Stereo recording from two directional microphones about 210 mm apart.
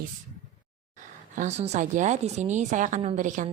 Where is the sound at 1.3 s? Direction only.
35° right (ahead or behind).